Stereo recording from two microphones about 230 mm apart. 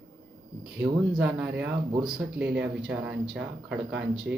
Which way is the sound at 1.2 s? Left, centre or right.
Centre.